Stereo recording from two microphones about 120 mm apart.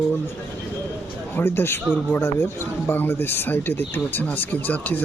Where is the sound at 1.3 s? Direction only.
20° left (ahead or behind).